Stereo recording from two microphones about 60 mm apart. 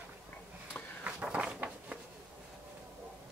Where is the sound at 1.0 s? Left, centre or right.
Right.